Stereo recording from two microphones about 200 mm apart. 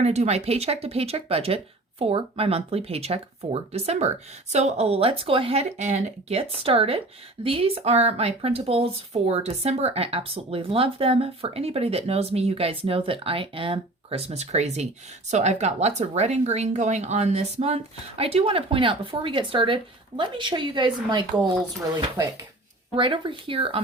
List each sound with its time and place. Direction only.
0.0 s speech: 30° right (ahead or behind)
21.3 s speech: 5° right (ahead or behind)
23.0 s speech: 25° right (ahead or behind)